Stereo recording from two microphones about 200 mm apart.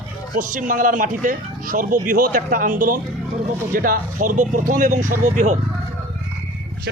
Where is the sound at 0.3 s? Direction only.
40° right (ahead or behind).